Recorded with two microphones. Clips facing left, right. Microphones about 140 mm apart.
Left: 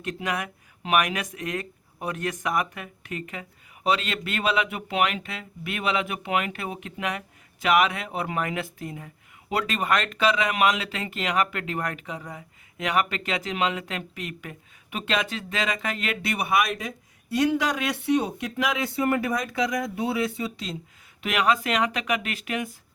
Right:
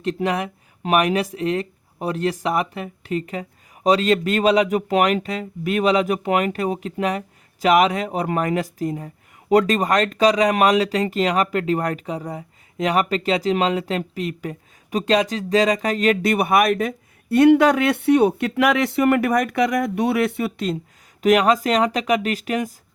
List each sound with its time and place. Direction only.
0.0 s speech: 30° right (ahead or behind); by 20.7 s 60° right (ahead or behind)
21.2 s speech: 40° right (ahead or behind)